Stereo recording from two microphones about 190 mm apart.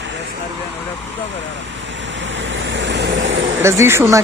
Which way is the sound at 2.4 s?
75° right (ahead or behind).